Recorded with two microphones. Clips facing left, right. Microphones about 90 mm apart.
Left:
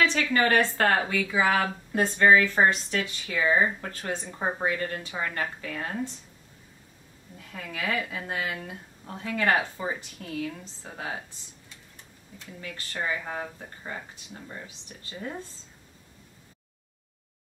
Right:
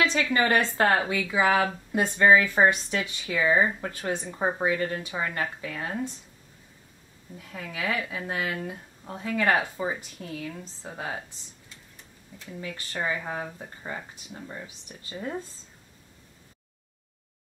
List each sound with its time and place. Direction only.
0.0 s speech: 15° right (ahead or behind)
7.5 s a woman's voice: 5° right (ahead or behind)
10.9 s a woman's voice: 5° right (ahead or behind)
12.5 s speech: 15° right (ahead or behind)